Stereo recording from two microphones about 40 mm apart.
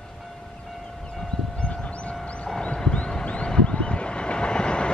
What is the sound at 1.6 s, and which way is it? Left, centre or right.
Vehicle, left.